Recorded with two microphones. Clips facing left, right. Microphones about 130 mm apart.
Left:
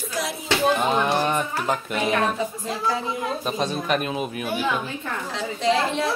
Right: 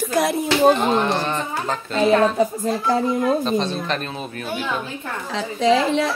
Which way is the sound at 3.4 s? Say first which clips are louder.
Right 4 dB; 10° left (ahead or behind).